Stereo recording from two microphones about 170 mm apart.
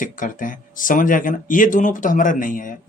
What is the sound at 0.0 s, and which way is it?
Speech, 50° left (ahead or behind).